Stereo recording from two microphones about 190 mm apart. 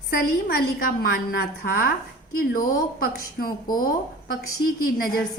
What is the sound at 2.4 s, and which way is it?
A woman's voice, 50° left (ahead or behind).